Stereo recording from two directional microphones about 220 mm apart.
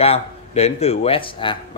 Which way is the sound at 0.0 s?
30° left (ahead or behind).